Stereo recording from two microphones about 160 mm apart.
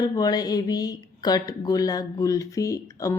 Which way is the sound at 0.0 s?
25° left (ahead or behind).